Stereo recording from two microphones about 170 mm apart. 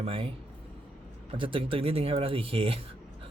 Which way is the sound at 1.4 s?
30° right (ahead or behind).